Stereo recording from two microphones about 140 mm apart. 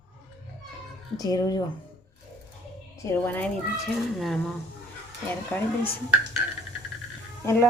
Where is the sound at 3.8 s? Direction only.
Centre (ahead or behind).